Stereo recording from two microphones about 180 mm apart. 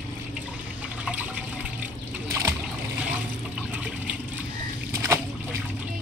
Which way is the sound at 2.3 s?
15° right (ahead or behind).